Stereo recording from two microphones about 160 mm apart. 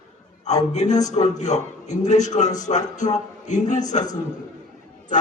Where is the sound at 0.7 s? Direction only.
45° left (ahead or behind).